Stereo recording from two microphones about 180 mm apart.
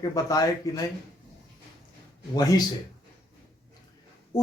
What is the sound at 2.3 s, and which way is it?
Speech, 20° left (ahead or behind).